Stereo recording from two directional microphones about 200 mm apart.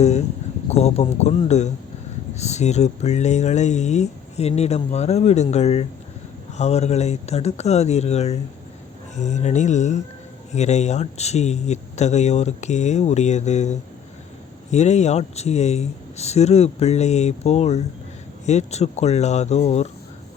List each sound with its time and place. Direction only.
0.0 s speech: 35° left (ahead or behind)